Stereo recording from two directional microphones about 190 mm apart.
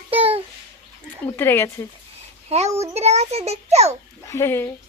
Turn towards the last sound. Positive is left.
turn(degrees=15)  # may be behind; listen again after turning